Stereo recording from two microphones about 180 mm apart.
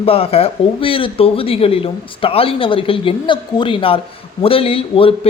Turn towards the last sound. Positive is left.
turn(degrees=30)  # may be behind; listen again after turning